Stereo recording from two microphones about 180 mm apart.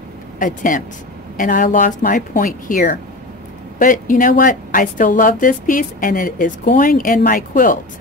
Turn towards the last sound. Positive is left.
turn(degrees=50)  # may be behind; listen again after turning